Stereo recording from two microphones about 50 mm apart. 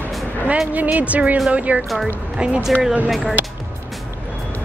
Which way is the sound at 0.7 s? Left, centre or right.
Right.